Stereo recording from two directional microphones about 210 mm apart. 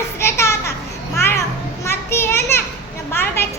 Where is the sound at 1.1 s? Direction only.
10° left (ahead or behind).